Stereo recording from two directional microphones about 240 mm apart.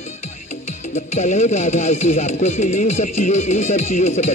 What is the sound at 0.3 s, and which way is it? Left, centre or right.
Speech, left.